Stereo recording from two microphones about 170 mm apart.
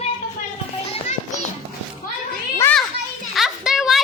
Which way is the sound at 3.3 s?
Centre (ahead or behind).